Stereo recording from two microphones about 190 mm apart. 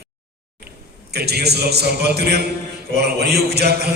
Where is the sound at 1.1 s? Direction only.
55° right (ahead or behind).